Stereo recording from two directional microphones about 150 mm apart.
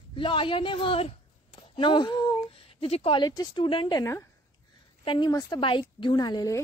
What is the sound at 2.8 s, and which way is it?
A woman's voice, 40° left (ahead or behind).